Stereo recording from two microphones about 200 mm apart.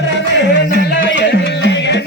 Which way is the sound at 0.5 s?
55° left (ahead or behind).